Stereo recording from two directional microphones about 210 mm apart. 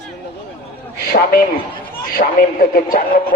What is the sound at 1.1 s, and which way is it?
A man's voice, 45° left (ahead or behind).